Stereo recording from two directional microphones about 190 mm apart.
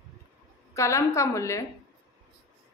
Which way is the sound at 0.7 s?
15° left (ahead or behind).